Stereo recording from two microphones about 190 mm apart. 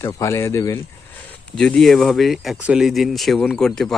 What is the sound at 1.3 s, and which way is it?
Speech, 5° left (ahead or behind).